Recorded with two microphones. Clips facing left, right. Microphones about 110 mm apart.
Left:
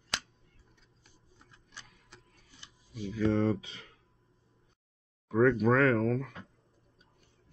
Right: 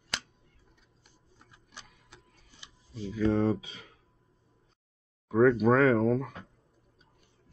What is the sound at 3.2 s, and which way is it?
Speech, 5° right (ahead or behind).